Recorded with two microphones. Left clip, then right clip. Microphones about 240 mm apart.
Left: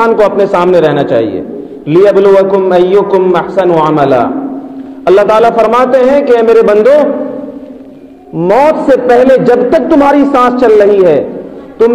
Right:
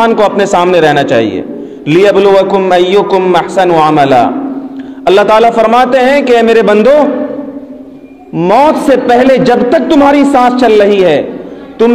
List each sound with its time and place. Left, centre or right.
0.0 s a man's voice: right
8.4 s a man's voice: right